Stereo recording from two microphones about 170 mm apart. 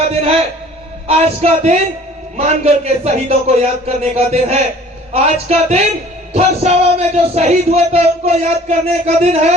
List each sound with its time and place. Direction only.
0.1 s a man's voice: 35° right (ahead or behind)